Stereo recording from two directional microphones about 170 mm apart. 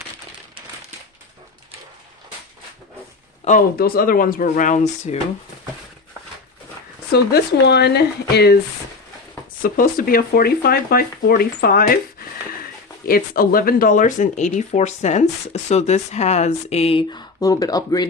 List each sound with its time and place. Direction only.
3.4 s speech: 35° left (ahead or behind)
3.8 s speech: 60° left (ahead or behind); by 5.1 s 45° left (ahead or behind)
7.1 s speech: 75° left (ahead or behind)
9.6 s speech: 55° left (ahead or behind)
13.1 s speech: 60° left (ahead or behind); by 18.1 s 20° left (ahead or behind)